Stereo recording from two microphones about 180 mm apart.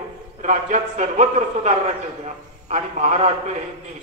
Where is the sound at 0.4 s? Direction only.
40° right (ahead or behind).